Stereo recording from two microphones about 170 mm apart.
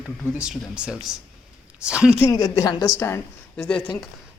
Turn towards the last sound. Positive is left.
turn(degrees=5)  # may be behind; listen again after turning